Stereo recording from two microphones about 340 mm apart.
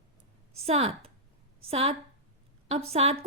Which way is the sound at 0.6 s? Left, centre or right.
Centre.